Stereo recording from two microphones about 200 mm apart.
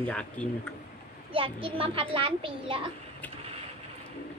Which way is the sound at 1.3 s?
25° right (ahead or behind).